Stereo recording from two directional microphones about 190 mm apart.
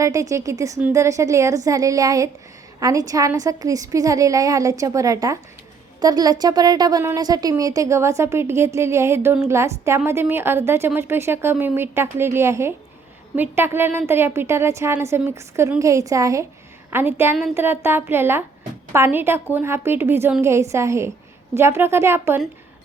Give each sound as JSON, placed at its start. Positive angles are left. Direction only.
{"t": 0.0, "sound": "a woman's voice", "side_deg": -15}